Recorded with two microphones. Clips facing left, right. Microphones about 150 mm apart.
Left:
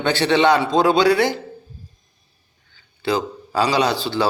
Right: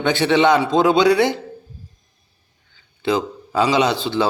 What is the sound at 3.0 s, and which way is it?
A man's voice, 20° right (ahead or behind).